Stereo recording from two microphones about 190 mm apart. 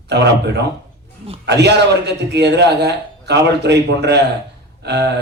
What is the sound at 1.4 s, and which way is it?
A man's voice, 60° right (ahead or behind).